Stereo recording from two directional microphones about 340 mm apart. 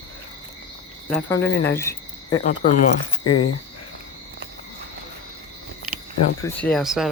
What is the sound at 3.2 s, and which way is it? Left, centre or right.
Speech, left.